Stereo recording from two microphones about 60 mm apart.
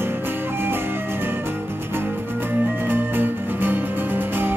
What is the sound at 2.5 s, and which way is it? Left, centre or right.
Music, right.